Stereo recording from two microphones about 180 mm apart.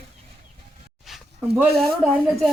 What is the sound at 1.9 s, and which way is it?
Speech, centre (ahead or behind).